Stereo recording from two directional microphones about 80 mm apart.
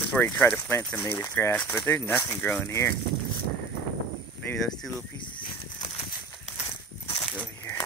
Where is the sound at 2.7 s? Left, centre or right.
Left.